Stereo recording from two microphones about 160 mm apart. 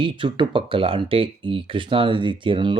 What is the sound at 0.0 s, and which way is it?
Speech, 30° right (ahead or behind).